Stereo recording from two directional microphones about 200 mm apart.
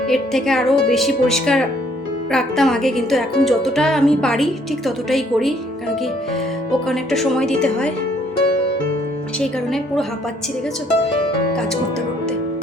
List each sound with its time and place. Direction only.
0.1 s speech: centre (ahead or behind)
6.8 s speech: centre (ahead or behind)
9.4 s speech: centre (ahead or behind)